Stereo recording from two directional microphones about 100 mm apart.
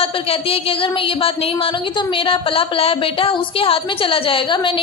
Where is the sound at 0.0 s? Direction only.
75° left (ahead or behind).